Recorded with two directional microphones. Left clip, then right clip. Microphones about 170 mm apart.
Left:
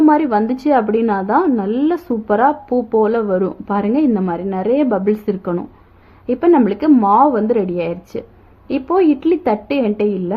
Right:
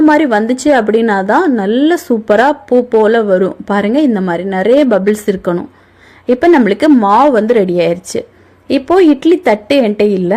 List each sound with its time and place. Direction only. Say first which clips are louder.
0.1 s a woman's voice: right 5 dB; 20° right (ahead or behind)